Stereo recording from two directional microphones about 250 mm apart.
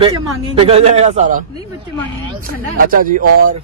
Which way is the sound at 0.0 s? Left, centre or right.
Right.